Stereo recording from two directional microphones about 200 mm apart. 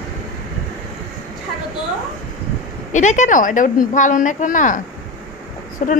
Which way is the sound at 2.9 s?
35° left (ahead or behind).